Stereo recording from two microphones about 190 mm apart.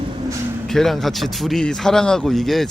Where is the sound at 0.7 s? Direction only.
Centre (ahead or behind).